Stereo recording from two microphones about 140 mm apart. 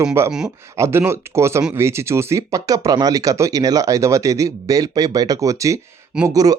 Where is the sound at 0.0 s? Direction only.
20° right (ahead or behind).